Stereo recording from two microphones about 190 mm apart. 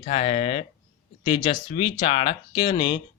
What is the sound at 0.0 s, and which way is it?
Speech, 35° left (ahead or behind).